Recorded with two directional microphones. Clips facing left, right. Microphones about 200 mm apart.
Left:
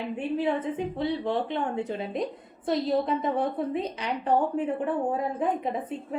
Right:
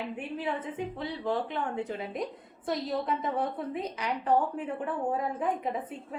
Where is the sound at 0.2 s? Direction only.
25° left (ahead or behind).